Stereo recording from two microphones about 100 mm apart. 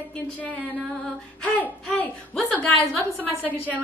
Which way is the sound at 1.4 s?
15° left (ahead or behind).